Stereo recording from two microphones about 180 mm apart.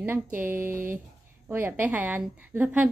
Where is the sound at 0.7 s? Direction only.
50° right (ahead or behind).